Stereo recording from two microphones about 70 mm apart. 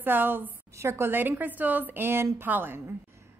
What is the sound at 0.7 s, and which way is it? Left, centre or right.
A woman's voice, right.